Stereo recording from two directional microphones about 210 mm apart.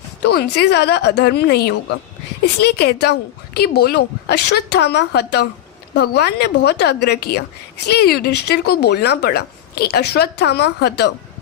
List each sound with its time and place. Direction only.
0.2 s a woman's voice: 50° left (ahead or behind)